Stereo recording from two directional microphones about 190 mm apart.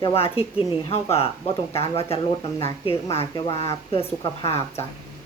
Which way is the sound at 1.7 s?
30° left (ahead or behind).